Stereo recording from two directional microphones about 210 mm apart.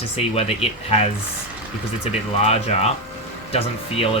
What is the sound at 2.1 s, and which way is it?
Speech, 30° left (ahead or behind).